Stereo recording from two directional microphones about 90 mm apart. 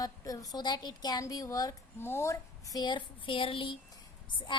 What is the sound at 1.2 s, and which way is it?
Speech, 40° left (ahead or behind).